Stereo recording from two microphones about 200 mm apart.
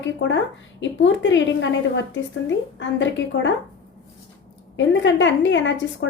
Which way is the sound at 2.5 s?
65° left (ahead or behind).